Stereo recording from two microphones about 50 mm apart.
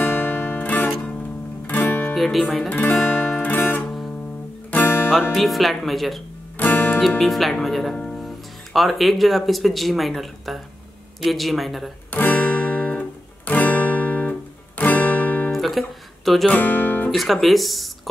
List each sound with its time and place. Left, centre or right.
0.0 s music: left
2.1 s speech: centre
2.7 s guitar: left
3.8 s music: centre
4.8 s music: left
5.3 s speech: centre
6.6 s music: left
7.0 s speech: centre
7.9 s music: centre
8.7 s speech: centre
12.1 s music: left
15.5 s guitar: centre
16.4 s music: left
17.1 s speech: centre